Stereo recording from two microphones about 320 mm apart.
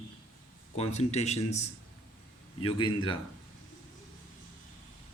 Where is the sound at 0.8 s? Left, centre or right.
Centre.